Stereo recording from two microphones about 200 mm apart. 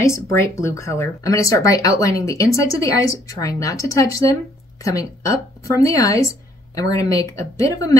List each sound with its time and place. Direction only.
0.0 s speech: 15° left (ahead or behind)